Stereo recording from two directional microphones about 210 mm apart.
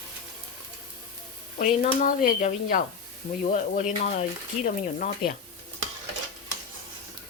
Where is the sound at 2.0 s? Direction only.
40° left (ahead or behind).